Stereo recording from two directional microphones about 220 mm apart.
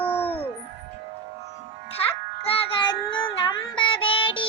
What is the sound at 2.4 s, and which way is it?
Child singing, 25° left (ahead or behind).